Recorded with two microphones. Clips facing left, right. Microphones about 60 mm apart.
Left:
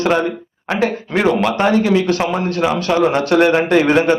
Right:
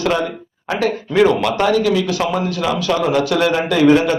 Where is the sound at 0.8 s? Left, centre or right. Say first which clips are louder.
Right 2 dB; left.